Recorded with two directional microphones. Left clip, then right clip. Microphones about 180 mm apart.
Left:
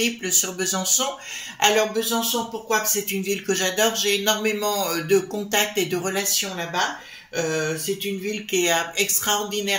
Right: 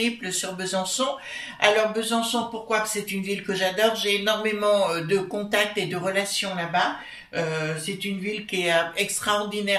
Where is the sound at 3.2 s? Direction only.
50° left (ahead or behind).